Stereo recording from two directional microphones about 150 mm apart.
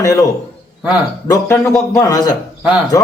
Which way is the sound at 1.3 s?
20° left (ahead or behind).